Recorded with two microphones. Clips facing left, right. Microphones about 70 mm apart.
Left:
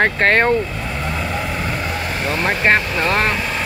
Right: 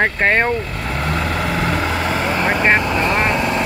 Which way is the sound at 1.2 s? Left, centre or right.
Right.